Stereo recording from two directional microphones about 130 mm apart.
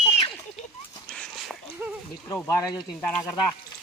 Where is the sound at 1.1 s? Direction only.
5° left (ahead or behind).